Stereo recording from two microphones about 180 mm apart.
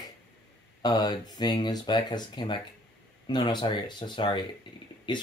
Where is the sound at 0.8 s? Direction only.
20° left (ahead or behind).